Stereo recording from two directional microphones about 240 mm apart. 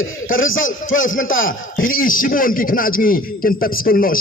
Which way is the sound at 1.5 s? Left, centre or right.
Left.